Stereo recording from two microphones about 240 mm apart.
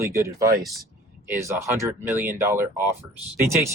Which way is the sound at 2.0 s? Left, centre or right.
Right.